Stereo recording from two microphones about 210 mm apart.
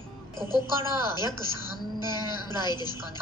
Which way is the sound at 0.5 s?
20° left (ahead or behind).